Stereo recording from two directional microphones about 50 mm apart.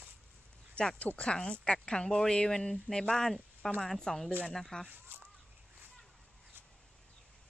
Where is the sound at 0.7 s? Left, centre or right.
Left.